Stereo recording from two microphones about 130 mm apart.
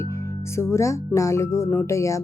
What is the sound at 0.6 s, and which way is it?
Speech, 20° left (ahead or behind).